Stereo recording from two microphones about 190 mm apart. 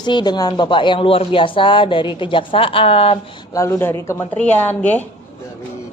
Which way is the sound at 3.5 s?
15° left (ahead or behind).